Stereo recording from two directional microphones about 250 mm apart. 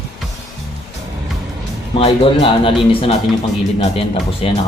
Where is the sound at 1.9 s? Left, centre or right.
Left.